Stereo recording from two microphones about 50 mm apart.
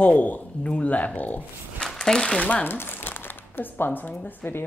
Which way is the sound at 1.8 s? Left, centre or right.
Centre.